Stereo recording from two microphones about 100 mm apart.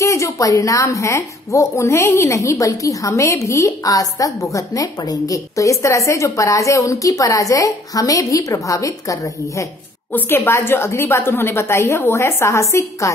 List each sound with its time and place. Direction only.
0.0 s a woman's voice: 30° left (ahead or behind)
10.1 s a woman's voice: 20° left (ahead or behind)